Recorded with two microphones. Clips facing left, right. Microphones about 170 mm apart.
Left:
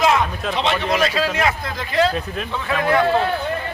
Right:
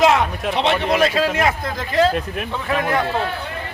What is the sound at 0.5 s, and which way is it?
Speech, 60° right (ahead or behind).